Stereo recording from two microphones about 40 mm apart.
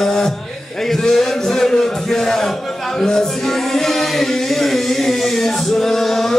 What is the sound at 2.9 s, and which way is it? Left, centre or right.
Music, centre.